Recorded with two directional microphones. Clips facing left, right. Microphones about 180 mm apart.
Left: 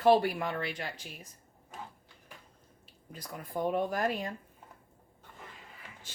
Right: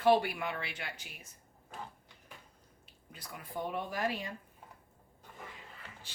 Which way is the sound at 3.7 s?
50° left (ahead or behind).